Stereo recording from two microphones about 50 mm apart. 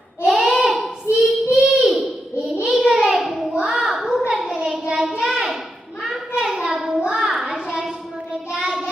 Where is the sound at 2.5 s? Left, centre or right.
Right.